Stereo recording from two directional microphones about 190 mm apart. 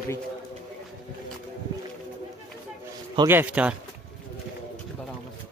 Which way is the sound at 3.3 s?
10° right (ahead or behind).